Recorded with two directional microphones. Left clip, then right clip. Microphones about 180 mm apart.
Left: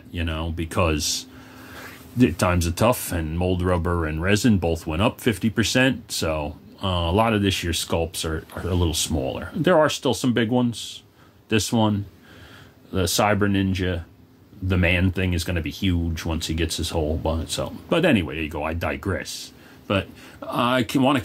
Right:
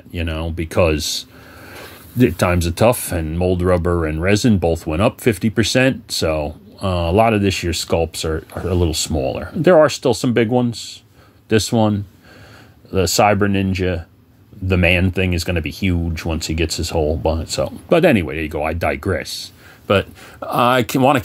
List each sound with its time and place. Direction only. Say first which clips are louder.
0.1 s speech: right 4 dB; 20° right (ahead or behind)
19.9 s speech: right 8 dB; 60° right (ahead or behind)